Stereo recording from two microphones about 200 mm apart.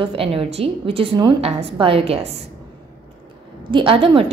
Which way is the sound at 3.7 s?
25° right (ahead or behind).